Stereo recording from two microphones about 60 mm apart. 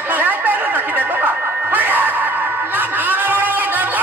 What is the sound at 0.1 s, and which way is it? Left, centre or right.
Music, right.